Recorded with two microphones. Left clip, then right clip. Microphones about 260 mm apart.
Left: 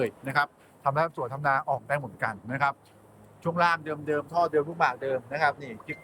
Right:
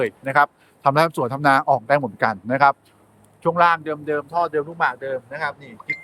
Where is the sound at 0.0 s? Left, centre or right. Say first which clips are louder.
Right 9 dB; centre.